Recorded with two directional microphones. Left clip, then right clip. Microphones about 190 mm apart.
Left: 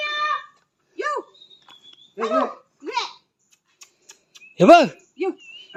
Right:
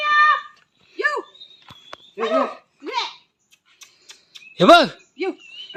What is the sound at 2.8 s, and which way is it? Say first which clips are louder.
Babbling: right 1 dB; 10° right (ahead or behind).